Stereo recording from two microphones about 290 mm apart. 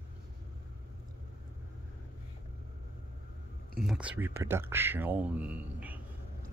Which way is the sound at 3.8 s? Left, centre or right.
Centre.